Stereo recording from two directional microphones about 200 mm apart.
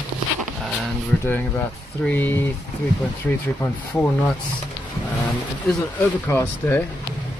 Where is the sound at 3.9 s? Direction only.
5° left (ahead or behind).